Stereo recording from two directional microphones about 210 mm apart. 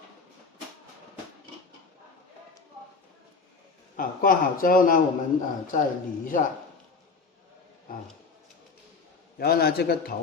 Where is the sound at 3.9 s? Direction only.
40° left (ahead or behind).